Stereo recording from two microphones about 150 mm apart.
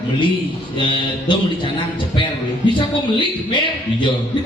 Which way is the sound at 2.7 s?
30° left (ahead or behind).